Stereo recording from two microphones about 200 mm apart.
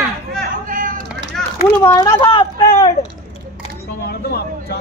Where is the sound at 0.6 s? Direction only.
40° right (ahead or behind).